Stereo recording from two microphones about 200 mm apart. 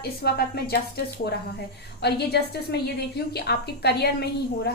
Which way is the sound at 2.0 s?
55° left (ahead or behind).